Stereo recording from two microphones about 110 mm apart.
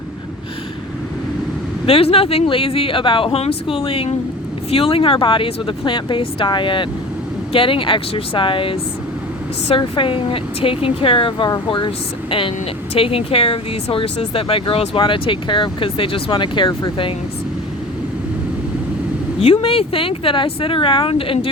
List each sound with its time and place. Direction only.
1.9 s speech: 60° left (ahead or behind); by 17.2 s 45° left (ahead or behind)
19.4 s speech: 60° left (ahead or behind)